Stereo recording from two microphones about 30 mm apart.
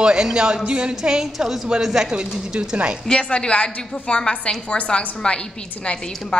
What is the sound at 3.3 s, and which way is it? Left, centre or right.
A woman's voice, left.